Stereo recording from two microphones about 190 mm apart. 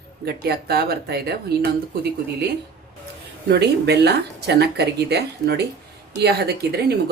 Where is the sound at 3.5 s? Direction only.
60° right (ahead or behind).